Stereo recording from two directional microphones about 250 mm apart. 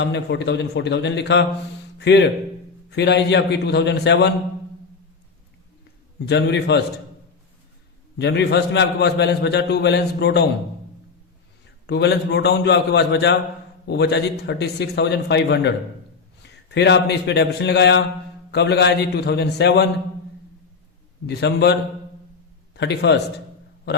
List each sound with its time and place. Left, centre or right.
0.0 s a man's voice: left
6.2 s a man's voice: left
8.2 s a man's voice: left
11.9 s a man's voice: left
16.7 s a man's voice: left
21.2 s a man's voice: left